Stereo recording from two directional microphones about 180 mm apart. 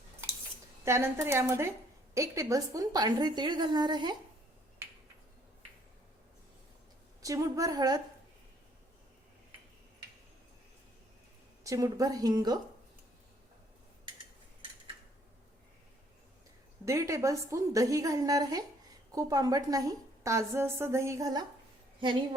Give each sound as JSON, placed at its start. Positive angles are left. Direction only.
{"t": 0.9, "sound": "a woman's voice", "side_deg": -15}
{"t": 7.2, "sound": "a woman's voice", "side_deg": -20}
{"t": 11.6, "sound": "a woman's voice", "side_deg": -20}
{"t": 16.8, "sound": "a woman's voice", "side_deg": -15}